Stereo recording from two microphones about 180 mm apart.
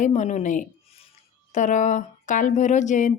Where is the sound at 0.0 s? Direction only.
40° left (ahead or behind).